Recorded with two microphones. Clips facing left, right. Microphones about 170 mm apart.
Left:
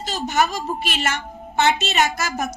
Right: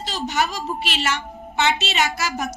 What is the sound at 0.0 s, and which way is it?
A woman's voice, 45° left (ahead or behind).